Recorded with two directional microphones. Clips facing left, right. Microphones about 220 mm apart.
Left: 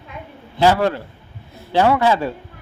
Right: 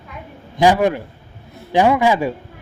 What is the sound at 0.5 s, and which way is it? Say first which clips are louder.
A woman's voice: right 1 dB; 15° right (ahead or behind).